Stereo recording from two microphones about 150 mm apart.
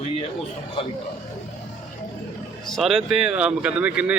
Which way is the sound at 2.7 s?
Centre (ahead or behind).